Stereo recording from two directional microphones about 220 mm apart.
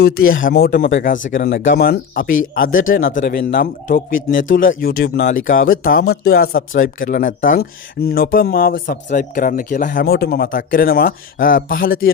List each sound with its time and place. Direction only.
0.4 s speech: 40° left (ahead or behind)
1.0 s speech: 35° left (ahead or behind)
3.0 s speech: 60° left (ahead or behind); by 12.1 s 40° left (ahead or behind)